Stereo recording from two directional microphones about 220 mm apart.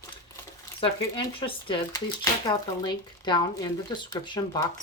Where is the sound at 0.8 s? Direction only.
25° left (ahead or behind).